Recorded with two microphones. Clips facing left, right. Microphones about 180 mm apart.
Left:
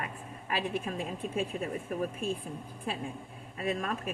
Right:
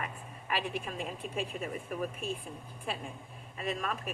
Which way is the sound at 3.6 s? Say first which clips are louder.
Left 3 dB; 45° left (ahead or behind).